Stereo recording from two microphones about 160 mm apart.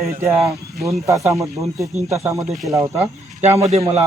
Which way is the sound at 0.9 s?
20° right (ahead or behind).